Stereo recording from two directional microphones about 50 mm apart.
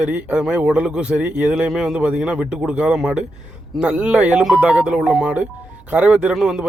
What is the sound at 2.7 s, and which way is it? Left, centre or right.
A man's voice, right.